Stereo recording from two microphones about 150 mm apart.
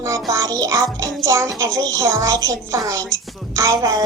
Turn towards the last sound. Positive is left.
turn(degrees=-25)  # may be behind; listen again after turning